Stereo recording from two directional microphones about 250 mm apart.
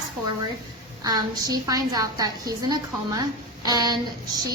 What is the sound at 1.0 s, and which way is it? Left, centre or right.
A woman's voice, centre.